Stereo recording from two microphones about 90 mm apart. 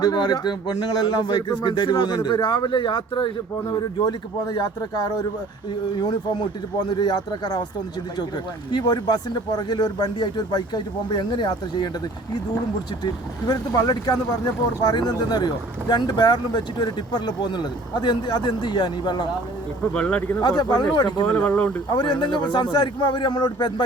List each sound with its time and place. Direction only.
0.0 s speech: 50° left (ahead or behind); by 3.3 s 65° left (ahead or behind)
3.7 s speech: 50° left (ahead or behind)
6.7 s speech: 50° left (ahead or behind)
8.7 s speech: 50° left (ahead or behind)
13.5 s speech: 45° left (ahead or behind)
19.9 s speech: 10° left (ahead or behind)
20.4 s speech: 50° left (ahead or behind)
21.2 s speech: 15° left (ahead or behind)
21.8 s speech: 50° left (ahead or behind)